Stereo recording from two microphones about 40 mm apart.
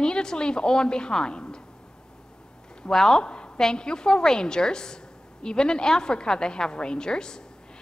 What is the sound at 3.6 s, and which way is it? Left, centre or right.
A woman's voice, left.